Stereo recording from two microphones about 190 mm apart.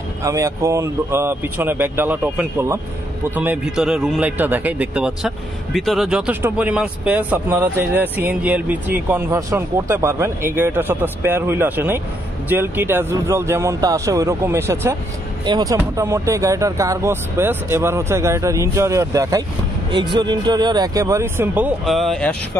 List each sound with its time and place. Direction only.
0.2 s a man's voice: 15° right (ahead or behind); by 22.3 s centre (ahead or behind)